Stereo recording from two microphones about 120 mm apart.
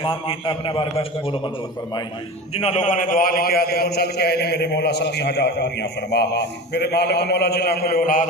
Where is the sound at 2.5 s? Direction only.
65° left (ahead or behind); by 3.0 s 90° left.